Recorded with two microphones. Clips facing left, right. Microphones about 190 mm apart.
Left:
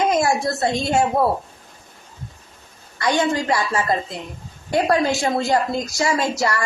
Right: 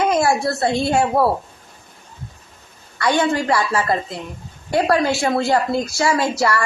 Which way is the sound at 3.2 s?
20° left (ahead or behind).